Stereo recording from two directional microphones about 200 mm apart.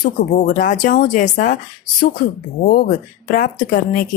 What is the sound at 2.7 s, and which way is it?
Speech, 45° left (ahead or behind).